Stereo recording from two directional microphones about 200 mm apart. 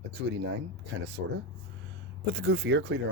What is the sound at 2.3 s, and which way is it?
Speech, 60° right (ahead or behind).